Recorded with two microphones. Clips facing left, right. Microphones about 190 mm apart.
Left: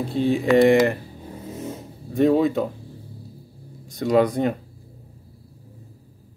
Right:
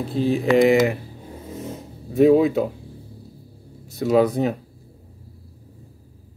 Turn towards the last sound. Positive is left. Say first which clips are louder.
# right 1 dB
turn(degrees=-5)  # may be behind; listen again after turning